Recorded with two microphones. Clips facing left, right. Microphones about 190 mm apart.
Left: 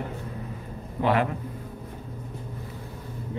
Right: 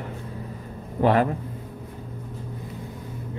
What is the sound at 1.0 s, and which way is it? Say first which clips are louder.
Speech: right 4 dB; 40° right (ahead or behind).